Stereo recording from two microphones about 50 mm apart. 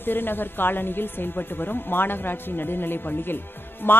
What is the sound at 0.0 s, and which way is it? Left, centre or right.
Speech, left.